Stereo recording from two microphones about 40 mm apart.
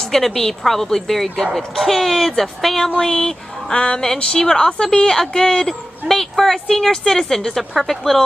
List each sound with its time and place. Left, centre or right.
0.1 s a woman's voice: centre
3.0 s a sound: centre
4.2 s a woman's voice: left; by 8.2 s centre